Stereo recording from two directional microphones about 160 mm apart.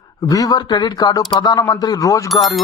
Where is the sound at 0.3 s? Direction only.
20° left (ahead or behind).